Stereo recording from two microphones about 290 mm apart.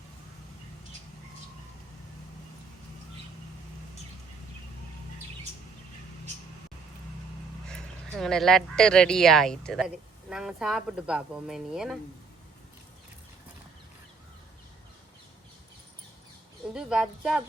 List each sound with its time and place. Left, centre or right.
7.7 s speech: centre
16.7 s speech: centre